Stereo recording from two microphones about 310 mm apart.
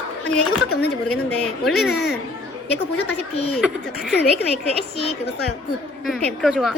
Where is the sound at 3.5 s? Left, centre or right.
Centre.